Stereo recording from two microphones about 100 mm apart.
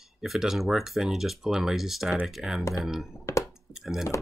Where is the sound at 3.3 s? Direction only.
30° left (ahead or behind).